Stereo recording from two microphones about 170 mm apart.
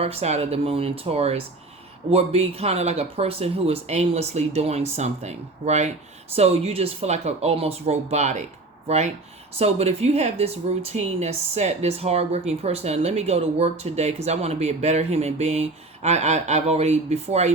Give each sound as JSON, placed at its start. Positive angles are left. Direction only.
{"t": 0.0, "sound": "a woman's voice", "side_deg": -35}